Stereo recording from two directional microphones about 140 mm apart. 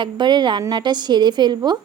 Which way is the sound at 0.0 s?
30° right (ahead or behind).